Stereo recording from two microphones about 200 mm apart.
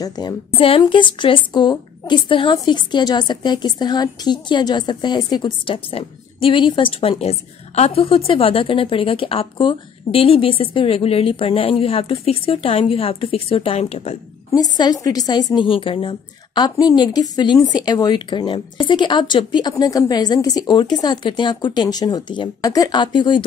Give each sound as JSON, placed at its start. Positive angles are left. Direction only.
{"t": 0.0, "sound": "a woman's voice", "side_deg": 20}
{"t": 14.5, "sound": "a woman's voice", "side_deg": 20}